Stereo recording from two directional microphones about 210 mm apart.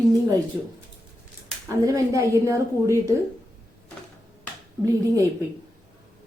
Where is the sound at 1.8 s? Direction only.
15° right (ahead or behind).